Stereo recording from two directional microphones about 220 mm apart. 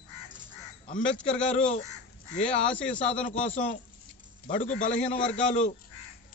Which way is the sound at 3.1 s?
30° left (ahead or behind).